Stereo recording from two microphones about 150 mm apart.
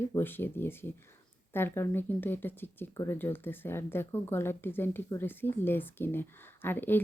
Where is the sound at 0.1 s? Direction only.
15° left (ahead or behind).